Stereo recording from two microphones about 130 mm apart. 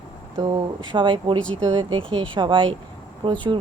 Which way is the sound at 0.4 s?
35° right (ahead or behind).